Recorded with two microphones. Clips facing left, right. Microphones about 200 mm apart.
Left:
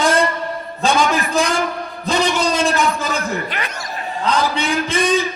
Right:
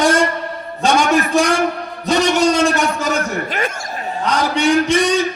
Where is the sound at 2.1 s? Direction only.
45° right (ahead or behind).